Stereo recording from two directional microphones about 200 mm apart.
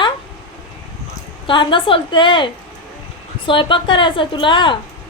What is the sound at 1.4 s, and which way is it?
A woman's voice, 25° left (ahead or behind).